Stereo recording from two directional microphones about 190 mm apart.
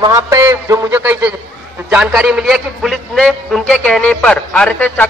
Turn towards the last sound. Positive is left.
turn(degrees=5)  # may be behind; listen again after turning